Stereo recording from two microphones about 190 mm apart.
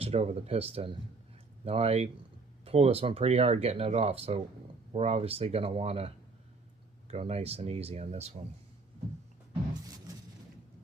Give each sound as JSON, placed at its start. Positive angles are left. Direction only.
{"t": 0.0, "sound": "speech", "side_deg": -35}
{"t": 1.6, "sound": "speech", "side_deg": -35}
{"t": 7.1, "sound": "speech", "side_deg": -30}